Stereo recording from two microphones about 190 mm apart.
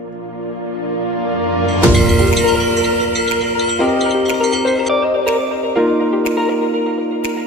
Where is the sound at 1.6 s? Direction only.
Centre (ahead or behind).